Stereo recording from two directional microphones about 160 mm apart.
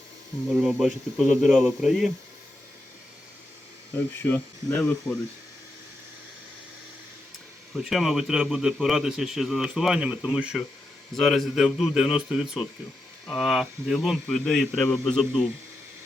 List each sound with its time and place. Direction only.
0.5 s speech: 5° right (ahead or behind)
4.2 s speech: 10° left (ahead or behind)
7.7 s speech: centre (ahead or behind)